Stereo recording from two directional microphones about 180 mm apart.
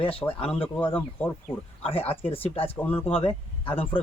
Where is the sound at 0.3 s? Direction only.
30° left (ahead or behind).